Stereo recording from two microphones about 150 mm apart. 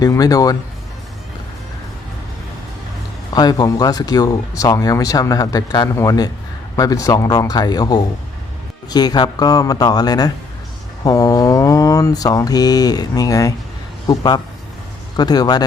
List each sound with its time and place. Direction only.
0.0 s speech: 25° left (ahead or behind)
3.3 s speech: 25° left (ahead or behind)
11.0 s mantra: 25° left (ahead or behind)
14.1 s speech: 25° left (ahead or behind)